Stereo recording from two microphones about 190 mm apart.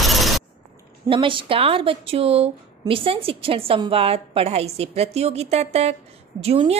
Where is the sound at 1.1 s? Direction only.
25° right (ahead or behind).